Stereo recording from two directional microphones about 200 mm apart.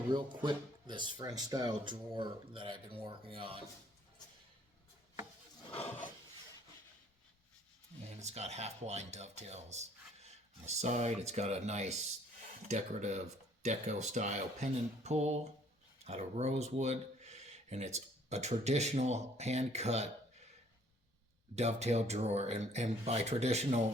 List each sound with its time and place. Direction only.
0.1 s speech: 25° right (ahead or behind)
8.2 s speech: 35° right (ahead or behind)
21.5 s speech: 35° right (ahead or behind)